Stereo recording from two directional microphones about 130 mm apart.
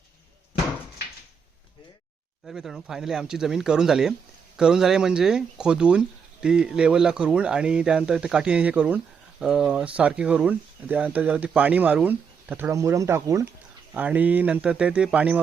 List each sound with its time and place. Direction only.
2.5 s speech: centre (ahead or behind)
12.7 s speech: 25° right (ahead or behind)
13.9 s speech: 10° right (ahead or behind)